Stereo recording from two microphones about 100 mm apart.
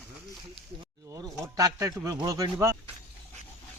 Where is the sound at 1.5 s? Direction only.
35° right (ahead or behind).